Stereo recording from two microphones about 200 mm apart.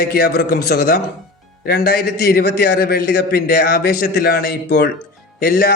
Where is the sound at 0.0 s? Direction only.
50° left (ahead or behind).